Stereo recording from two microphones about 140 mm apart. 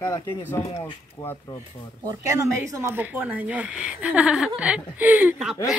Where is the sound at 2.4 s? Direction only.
20° right (ahead or behind).